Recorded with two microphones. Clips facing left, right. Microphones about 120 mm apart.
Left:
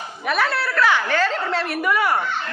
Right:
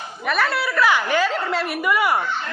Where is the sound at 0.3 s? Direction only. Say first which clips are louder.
Even; centre (ahead or behind).